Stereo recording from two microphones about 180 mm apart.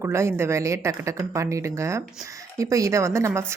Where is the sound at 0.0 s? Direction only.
15° right (ahead or behind).